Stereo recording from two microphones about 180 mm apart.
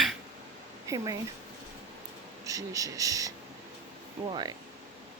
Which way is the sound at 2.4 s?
20° right (ahead or behind).